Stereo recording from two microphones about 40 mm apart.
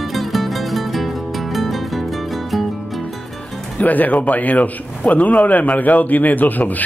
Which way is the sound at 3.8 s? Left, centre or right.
Left.